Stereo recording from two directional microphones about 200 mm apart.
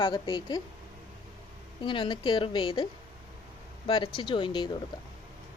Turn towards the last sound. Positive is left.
turn(degrees=20)  # may be behind; listen again after turning